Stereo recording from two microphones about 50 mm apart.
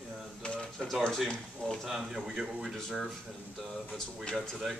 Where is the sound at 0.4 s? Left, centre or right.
Centre.